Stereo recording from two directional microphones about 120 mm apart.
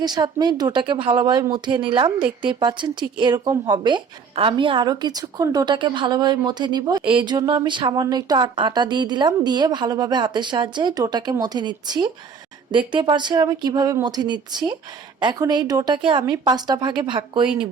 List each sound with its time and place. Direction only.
0.0 s speech: 35° right (ahead or behind)